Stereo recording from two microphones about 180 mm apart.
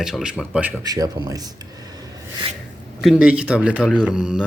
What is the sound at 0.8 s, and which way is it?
Speech, 20° right (ahead or behind).